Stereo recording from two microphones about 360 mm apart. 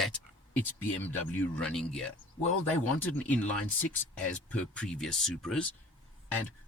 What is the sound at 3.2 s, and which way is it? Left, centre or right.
Speech, centre.